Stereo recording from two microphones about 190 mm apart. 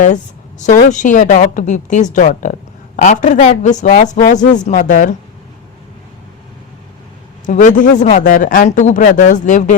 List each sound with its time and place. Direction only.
0.6 s speech: 40° left (ahead or behind)
7.4 s speech: 40° left (ahead or behind)